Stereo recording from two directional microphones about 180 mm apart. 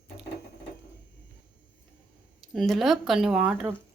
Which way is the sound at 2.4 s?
Centre (ahead or behind).